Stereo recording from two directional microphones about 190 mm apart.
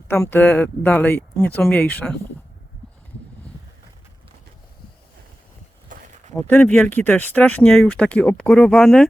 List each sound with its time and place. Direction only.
0.1 s speech: 10° left (ahead or behind)
5.9 s a sound: 45° right (ahead or behind)
6.3 s speech: 10° left (ahead or behind)